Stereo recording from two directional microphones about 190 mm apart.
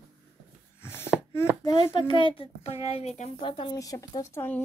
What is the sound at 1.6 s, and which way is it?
A child's voice, 25° left (ahead or behind).